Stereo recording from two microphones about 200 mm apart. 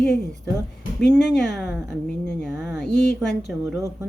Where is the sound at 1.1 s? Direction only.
Centre (ahead or behind).